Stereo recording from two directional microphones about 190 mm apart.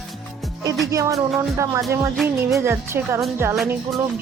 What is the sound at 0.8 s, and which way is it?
Speech, 15° right (ahead or behind).